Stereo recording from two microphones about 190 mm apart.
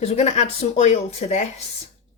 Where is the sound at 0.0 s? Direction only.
35° left (ahead or behind).